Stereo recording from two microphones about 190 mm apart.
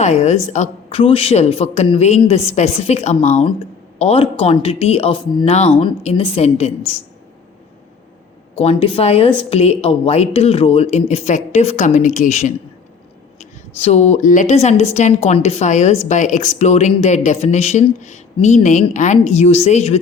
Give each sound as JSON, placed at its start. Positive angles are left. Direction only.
{"t": 0.0, "sound": "speech", "side_deg": 35}
{"t": 8.5, "sound": "a woman's voice", "side_deg": 30}